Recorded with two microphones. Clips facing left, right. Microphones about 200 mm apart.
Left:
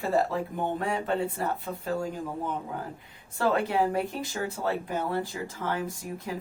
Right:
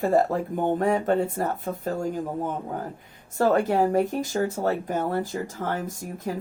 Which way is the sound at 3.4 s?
45° right (ahead or behind).